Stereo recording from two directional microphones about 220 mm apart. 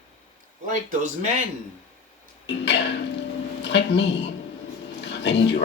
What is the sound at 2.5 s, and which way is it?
Speech, 50° left (ahead or behind).